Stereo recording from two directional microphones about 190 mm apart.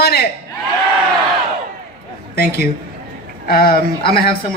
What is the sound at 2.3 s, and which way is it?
A woman's voice, 55° left (ahead or behind).